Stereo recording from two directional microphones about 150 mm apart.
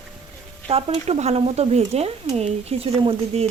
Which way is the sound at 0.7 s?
40° right (ahead or behind).